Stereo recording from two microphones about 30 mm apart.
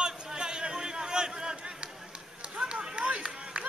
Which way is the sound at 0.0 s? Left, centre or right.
Right.